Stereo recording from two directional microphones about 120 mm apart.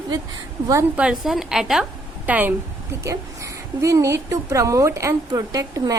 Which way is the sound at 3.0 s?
25° right (ahead or behind).